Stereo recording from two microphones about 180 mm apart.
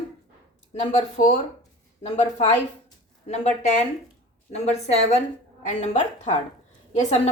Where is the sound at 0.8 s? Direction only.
35° left (ahead or behind).